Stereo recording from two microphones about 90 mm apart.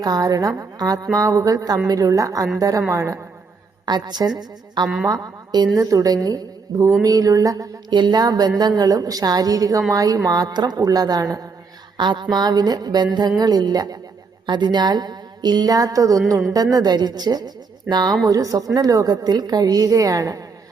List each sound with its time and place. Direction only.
0.0 s a woman's voice: 45° right (ahead or behind)
3.8 s a woman's voice: 50° right (ahead or behind)
5.0 s a woman's voice: 45° right (ahead or behind)
7.9 s a woman's voice: 55° right (ahead or behind)
11.9 s a woman's voice: 60° right (ahead or behind)
14.4 s a woman's voice: 55° right (ahead or behind); by 20.4 s 40° right (ahead or behind)